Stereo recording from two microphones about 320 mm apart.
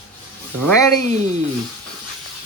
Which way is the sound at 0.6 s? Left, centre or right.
Right.